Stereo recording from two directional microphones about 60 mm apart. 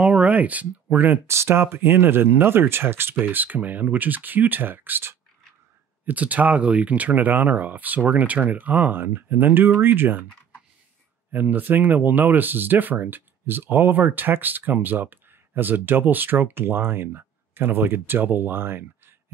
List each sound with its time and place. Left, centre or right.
0.0 s speech: right
1.2 s speech: right
11.3 s speech: right